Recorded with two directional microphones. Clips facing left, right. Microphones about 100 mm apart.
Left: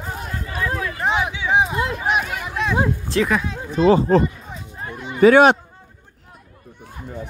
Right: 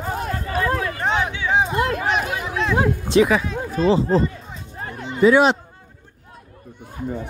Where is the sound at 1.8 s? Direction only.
55° right (ahead or behind).